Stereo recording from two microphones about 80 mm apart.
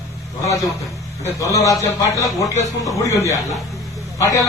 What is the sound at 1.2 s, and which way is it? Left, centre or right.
A man's voice, left.